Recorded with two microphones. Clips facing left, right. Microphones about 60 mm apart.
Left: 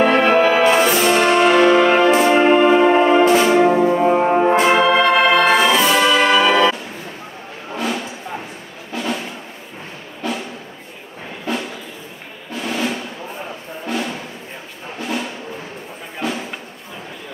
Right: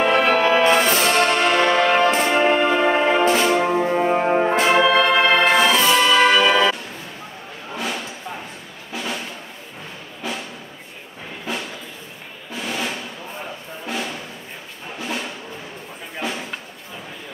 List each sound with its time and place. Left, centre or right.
0.0 s brass instrument: centre
2.0 s music: centre
3.9 s brass instrument: centre
4.2 s brass instrument: centre
4.8 s organ: centre
5.3 s music: centre
7.7 s a sound: centre
8.9 s music: centre
10.2 s music: centre
11.5 s a sound: centre
12.5 s drum: centre
13.8 s a sound: centre
15.0 s music: centre